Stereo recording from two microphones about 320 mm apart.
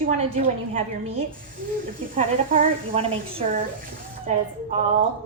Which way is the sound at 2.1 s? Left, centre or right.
Right.